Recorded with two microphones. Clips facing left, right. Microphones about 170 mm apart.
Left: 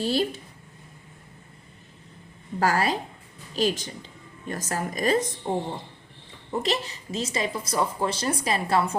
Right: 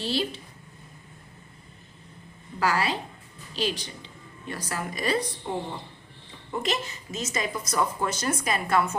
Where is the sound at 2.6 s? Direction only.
45° left (ahead or behind).